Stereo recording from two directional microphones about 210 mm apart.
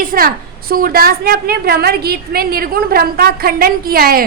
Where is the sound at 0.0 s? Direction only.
45° right (ahead or behind).